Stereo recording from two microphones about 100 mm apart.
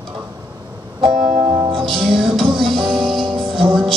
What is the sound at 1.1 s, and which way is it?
Music, centre (ahead or behind).